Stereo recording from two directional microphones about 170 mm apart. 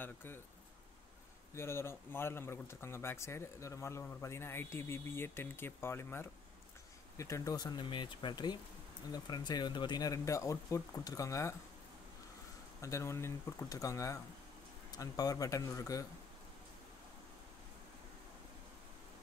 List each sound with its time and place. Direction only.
0.0 s speech: 10° left (ahead or behind)
1.5 s speech: 15° left (ahead or behind)
12.8 s speech: 15° left (ahead or behind)